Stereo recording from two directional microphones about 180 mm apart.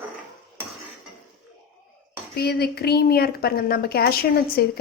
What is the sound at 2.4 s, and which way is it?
A woman's voice, 60° left (ahead or behind).